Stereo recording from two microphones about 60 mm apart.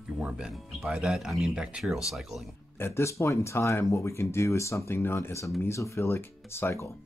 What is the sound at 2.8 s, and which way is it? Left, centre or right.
Speech, left.